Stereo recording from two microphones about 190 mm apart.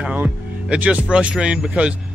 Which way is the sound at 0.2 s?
5° right (ahead or behind).